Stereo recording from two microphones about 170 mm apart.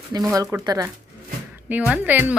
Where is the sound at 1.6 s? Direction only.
10° right (ahead or behind).